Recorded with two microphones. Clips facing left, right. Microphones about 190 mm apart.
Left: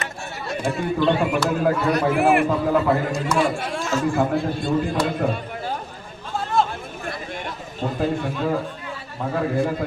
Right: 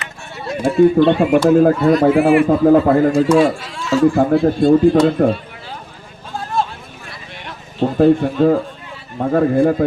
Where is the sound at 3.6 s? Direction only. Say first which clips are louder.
Right 5 dB; 50° left (ahead or behind).